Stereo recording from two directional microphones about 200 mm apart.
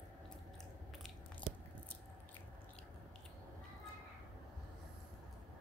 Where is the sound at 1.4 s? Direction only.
5° left (ahead or behind).